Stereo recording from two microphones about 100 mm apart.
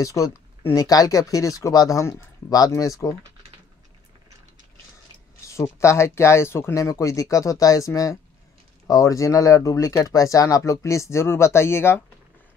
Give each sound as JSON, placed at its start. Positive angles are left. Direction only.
{"t": 0.0, "sound": "speech", "side_deg": 35}
{"t": 5.5, "sound": "speech", "side_deg": 30}